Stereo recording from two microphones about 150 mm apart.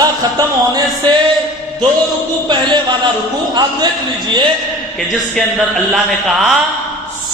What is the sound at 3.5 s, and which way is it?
Speech, 30° right (ahead or behind).